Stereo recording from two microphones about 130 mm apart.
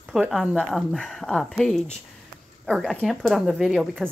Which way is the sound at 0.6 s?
Centre (ahead or behind).